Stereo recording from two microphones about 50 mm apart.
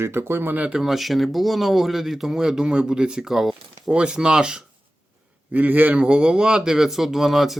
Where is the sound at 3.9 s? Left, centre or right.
Centre.